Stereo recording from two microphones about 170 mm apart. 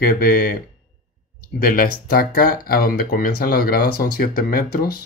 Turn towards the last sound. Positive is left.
turn(degrees=60)  # may be behind; listen again after turning